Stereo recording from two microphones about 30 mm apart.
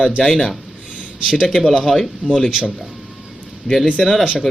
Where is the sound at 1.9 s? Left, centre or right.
Centre.